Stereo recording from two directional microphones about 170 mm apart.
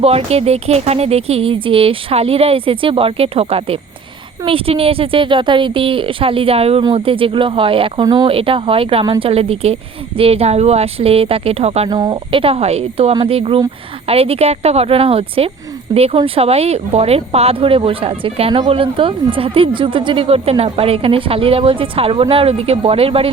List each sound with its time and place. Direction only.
0.0 s speech: 35° right (ahead or behind)
11.9 s speech: 25° right (ahead or behind)